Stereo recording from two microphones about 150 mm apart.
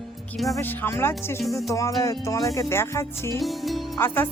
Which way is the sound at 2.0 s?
20° left (ahead or behind).